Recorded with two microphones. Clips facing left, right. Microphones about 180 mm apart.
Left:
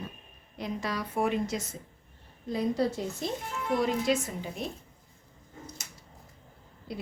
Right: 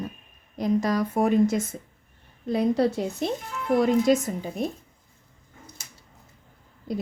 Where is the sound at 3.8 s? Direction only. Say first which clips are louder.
Right 8 dB; 45° right (ahead or behind).